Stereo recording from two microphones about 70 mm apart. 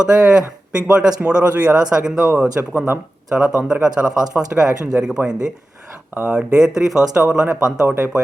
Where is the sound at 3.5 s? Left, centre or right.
Centre.